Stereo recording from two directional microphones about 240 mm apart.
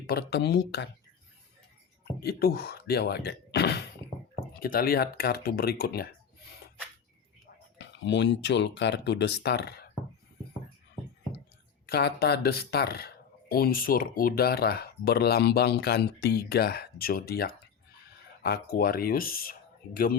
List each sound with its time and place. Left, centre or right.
0.1 s speech: left
2.2 s speech: left
7.8 s speech: left
11.9 s speech: left